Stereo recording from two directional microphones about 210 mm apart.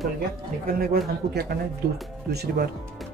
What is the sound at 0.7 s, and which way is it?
Speech, 45° right (ahead or behind).